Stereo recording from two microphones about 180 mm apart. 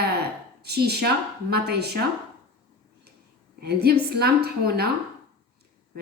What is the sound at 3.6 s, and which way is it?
A woman's voice, 65° right (ahead or behind).